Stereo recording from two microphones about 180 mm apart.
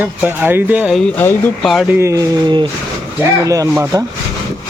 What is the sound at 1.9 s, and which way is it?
Speech, 15° right (ahead or behind).